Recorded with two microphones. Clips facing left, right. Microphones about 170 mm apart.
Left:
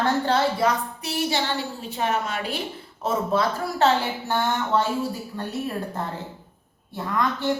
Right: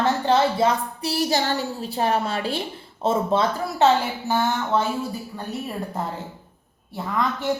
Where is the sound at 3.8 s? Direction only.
5° right (ahead or behind).